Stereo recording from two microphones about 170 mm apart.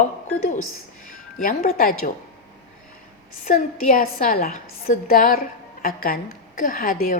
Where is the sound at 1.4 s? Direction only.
55° left (ahead or behind).